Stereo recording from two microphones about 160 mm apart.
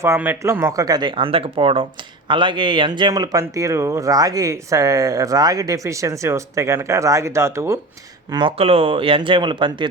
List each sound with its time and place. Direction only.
0.0 s speech: 15° right (ahead or behind)
8.3 s speech: 30° right (ahead or behind)